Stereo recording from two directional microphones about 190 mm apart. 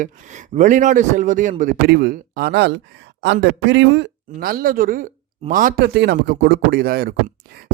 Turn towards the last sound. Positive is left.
turn(degrees=-55)  # may be behind; listen again after turning